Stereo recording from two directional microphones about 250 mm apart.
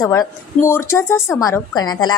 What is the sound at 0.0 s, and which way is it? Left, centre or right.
A woman's voice, centre.